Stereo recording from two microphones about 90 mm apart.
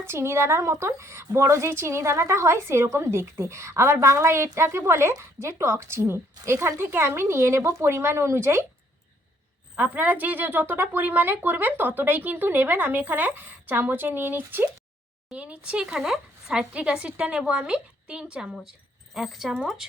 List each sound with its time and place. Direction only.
0.0 s a woman's voice: 30° right (ahead or behind)
9.7 s speech: 15° right (ahead or behind)
15.3 s speech: 10° right (ahead or behind)